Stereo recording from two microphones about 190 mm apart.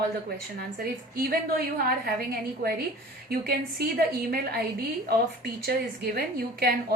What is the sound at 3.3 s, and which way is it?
A woman's voice, 55° right (ahead or behind).